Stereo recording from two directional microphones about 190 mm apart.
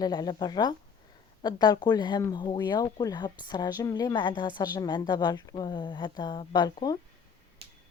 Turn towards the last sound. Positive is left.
turn(degrees=20)  # may be behind; listen again after turning